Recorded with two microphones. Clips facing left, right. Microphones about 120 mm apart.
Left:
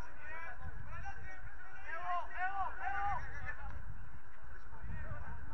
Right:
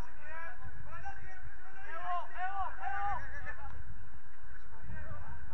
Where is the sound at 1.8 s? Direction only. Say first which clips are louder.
Right 2 dB; 15° right (ahead or behind).